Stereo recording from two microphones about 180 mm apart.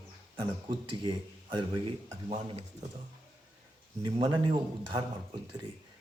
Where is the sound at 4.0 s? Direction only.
25° right (ahead or behind).